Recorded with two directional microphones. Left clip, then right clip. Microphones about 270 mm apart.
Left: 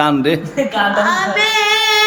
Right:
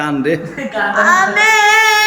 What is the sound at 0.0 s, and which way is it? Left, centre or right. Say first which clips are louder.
Speech: left 2 dB; centre.